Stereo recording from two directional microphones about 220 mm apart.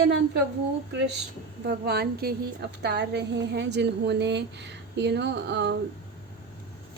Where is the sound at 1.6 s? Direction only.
45° right (ahead or behind).